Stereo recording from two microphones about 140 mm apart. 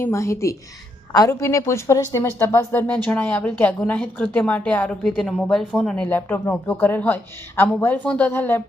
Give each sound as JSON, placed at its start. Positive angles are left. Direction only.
{"t": 0.0, "sound": "a woman's voice", "side_deg": 20}